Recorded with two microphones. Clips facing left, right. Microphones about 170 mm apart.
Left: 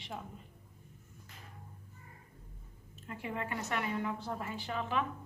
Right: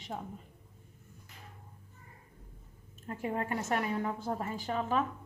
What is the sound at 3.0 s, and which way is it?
A woman's voice, 45° right (ahead or behind).